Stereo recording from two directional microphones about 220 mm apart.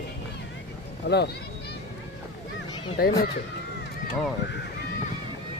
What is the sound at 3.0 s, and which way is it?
Speech, 45° left (ahead or behind).